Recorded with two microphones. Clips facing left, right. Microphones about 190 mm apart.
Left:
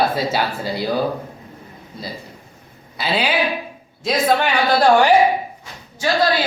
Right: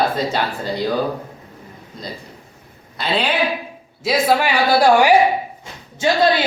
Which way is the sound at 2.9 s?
Centre (ahead or behind).